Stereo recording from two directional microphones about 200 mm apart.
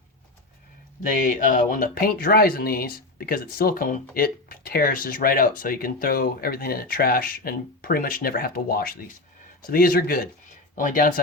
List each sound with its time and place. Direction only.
1.1 s speech: 40° left (ahead or behind)